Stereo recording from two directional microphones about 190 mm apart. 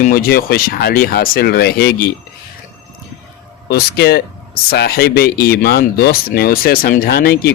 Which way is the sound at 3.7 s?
55° left (ahead or behind).